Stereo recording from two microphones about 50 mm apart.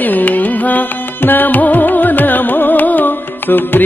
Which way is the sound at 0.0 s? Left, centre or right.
Left.